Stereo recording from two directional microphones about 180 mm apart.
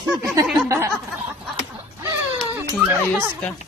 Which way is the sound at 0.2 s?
15° right (ahead or behind).